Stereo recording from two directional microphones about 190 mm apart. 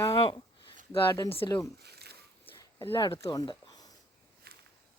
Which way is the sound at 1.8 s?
60° right (ahead or behind).